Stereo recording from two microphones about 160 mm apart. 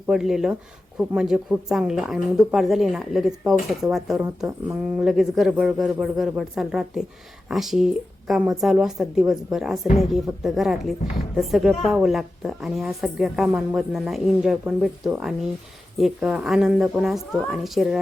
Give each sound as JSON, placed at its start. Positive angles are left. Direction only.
{"t": 0.1, "sound": "a woman's voice", "side_deg": -5}
{"t": 5.0, "sound": "a woman's voice", "side_deg": 0}